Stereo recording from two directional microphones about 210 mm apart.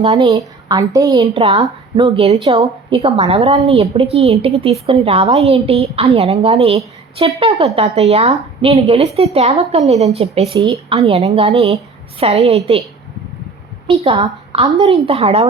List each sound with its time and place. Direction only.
0.0 s a woman's voice: 20° right (ahead or behind)
13.8 s a woman's voice: 25° right (ahead or behind)